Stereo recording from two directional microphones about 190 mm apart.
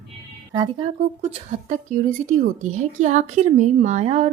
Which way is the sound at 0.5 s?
25° right (ahead or behind).